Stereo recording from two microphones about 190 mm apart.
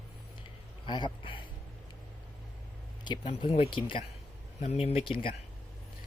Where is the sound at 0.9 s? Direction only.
25° left (ahead or behind).